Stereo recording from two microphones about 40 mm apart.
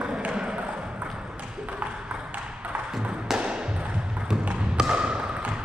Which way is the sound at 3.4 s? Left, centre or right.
Right.